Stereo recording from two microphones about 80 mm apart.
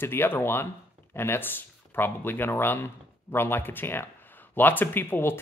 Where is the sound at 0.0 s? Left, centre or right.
Left.